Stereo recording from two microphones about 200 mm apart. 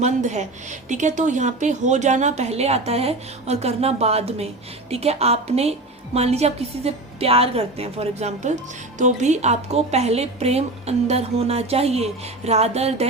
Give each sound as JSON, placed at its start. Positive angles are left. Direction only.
{"t": 0.0, "sound": "a woman's voice", "side_deg": -35}